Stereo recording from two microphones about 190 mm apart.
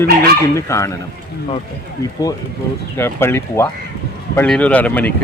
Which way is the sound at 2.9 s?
15° left (ahead or behind).